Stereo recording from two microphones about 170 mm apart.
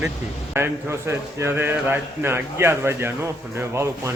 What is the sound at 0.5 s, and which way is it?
A man's voice, 15° right (ahead or behind).